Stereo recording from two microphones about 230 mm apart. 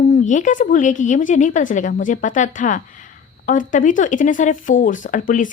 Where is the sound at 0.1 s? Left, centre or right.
Left.